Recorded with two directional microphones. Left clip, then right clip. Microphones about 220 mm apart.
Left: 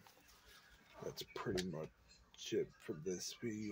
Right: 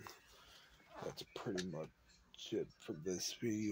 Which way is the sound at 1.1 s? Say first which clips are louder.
Left 4 dB; 5° right (ahead or behind).